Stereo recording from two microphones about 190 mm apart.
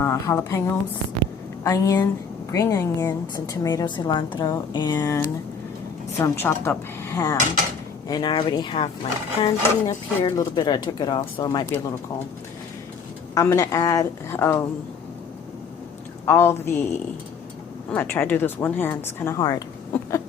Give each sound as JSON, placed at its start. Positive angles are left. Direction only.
{"t": 0.0, "sound": "a woman's voice", "side_deg": 15}
{"t": 13.3, "sound": "a woman's voice", "side_deg": 15}
{"t": 16.2, "sound": "a woman's voice", "side_deg": 10}
{"t": 17.9, "sound": "a woman's voice", "side_deg": 10}